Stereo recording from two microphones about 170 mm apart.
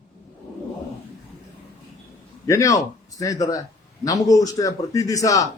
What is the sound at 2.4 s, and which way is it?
A man's voice, 20° left (ahead or behind).